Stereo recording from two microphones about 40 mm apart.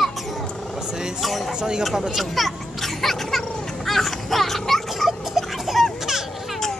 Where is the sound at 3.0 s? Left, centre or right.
Centre.